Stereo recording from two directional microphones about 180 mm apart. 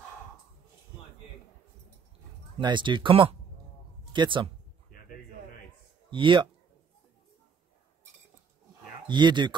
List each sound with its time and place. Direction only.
2.6 s speech: 25° right (ahead or behind)
6.0 s speech: 25° right (ahead or behind)
9.0 s speech: 25° right (ahead or behind)